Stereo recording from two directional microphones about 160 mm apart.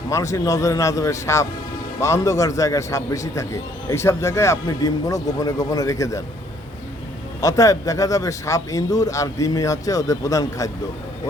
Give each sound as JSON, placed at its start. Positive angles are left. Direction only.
{"t": 0.1, "sound": "a man's voice", "side_deg": 20}
{"t": 7.4, "sound": "a man's voice", "side_deg": 20}